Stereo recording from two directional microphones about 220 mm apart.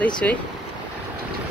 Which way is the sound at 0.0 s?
5° left (ahead or behind).